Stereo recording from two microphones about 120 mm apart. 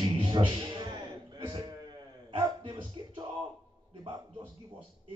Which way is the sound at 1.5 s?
35° right (ahead or behind).